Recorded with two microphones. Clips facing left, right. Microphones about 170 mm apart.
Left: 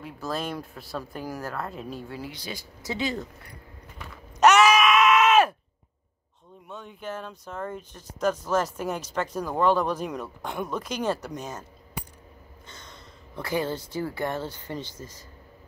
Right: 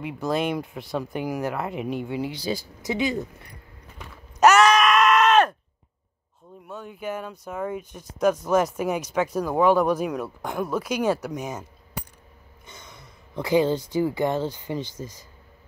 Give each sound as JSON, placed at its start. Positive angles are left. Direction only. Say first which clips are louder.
{"t": 0.2, "sound": "speech", "louder": "right 6 dB", "side_deg": -20}
{"t": 2.8, "sound": "speech", "louder": "right 3 dB", "side_deg": -15}
{"t": 4.4, "sound": "screaming", "louder": "right 2 dB", "side_deg": 0}
{"t": 6.7, "sound": "speech", "louder": "right 4 dB", "side_deg": -5}
{"t": 12.6, "sound": "speech", "louder": "right 2 dB", "side_deg": -10}